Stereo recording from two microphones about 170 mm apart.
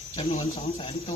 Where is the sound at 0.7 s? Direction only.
30° left (ahead or behind).